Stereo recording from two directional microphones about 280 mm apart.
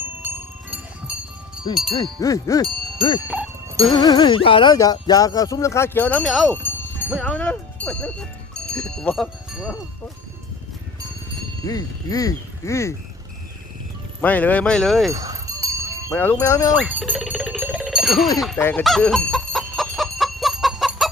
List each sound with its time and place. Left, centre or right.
1.7 s speech: centre
3.2 s speech: centre
3.9 s speech: centre
11.6 s speech: centre
14.2 s speech: centre
15.1 s speech: centre
16.0 s speech: centre
16.7 s music: centre
18.5 s chicken: centre